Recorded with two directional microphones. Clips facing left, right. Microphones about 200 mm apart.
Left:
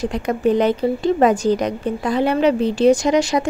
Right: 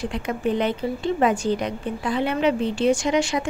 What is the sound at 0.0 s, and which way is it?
A woman's voice, 40° left (ahead or behind).